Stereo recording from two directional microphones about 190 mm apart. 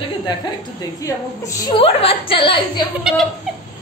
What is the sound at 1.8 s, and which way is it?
Speech, 30° left (ahead or behind).